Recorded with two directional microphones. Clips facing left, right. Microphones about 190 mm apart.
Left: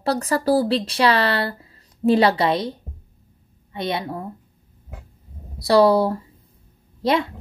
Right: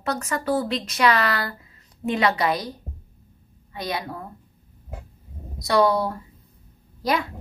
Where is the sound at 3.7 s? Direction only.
25° left (ahead or behind).